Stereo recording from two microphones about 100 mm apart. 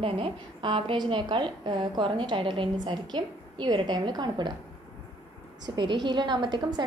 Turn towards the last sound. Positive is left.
turn(degrees=-50)  # may be behind; listen again after turning